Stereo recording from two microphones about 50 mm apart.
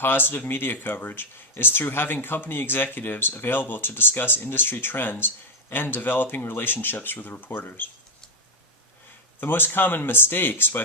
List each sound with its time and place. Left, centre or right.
0.0 s speech: left
9.4 s speech: left